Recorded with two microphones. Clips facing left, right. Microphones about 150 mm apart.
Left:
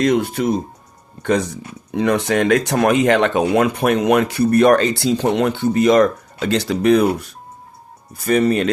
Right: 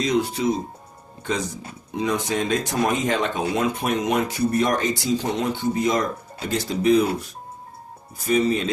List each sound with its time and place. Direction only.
0.0 s speech: 55° left (ahead or behind)